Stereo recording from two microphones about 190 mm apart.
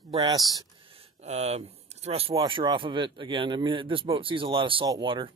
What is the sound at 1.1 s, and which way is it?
Speech, 35° right (ahead or behind).